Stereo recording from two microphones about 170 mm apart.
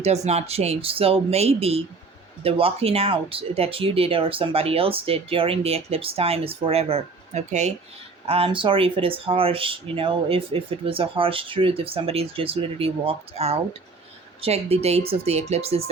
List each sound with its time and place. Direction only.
0.0 s speech: 40° right (ahead or behind)